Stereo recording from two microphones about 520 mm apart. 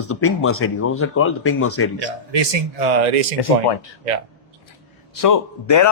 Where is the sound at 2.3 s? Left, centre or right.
Right.